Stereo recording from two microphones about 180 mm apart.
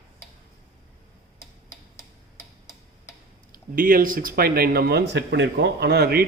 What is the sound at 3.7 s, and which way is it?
Speech, 50° right (ahead or behind).